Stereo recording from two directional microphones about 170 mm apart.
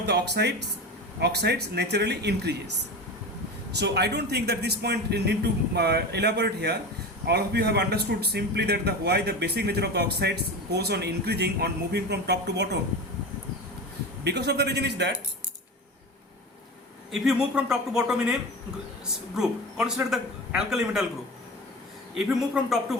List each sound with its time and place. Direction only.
0.0 s a man's voice: 75° right (ahead or behind)
3.8 s a man's voice: 80° right
14.3 s speech: 80° right
17.1 s a man's voice: 5° right (ahead or behind)
19.4 s a man's voice: 5° right (ahead or behind)
22.4 s a man's voice: centre (ahead or behind)